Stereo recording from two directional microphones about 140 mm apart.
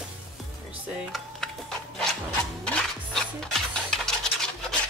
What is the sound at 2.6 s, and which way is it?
Music, 5° left (ahead or behind).